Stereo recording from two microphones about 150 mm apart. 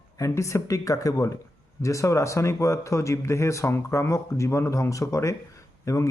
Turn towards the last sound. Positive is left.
turn(degrees=20)  # may be behind; listen again after turning